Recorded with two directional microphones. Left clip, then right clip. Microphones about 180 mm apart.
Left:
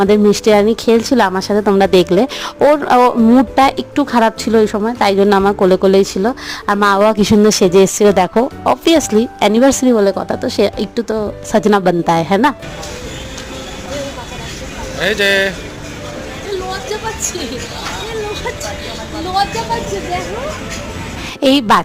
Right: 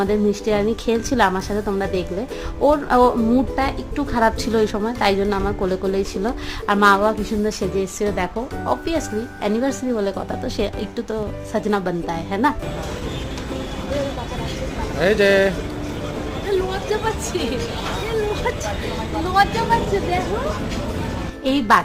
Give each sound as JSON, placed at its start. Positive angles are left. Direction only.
{"t": 0.0, "sound": "speech", "side_deg": 40}
{"t": 1.8, "sound": "speech", "side_deg": 45}
{"t": 7.0, "sound": "speech", "side_deg": 50}
{"t": 8.4, "sound": "speech", "side_deg": 40}
{"t": 14.9, "sound": "speech", "side_deg": -5}
{"t": 21.4, "sound": "a woman's voice", "side_deg": 60}